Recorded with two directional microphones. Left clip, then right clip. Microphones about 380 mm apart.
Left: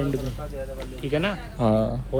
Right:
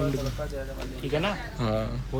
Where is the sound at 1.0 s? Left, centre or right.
Centre.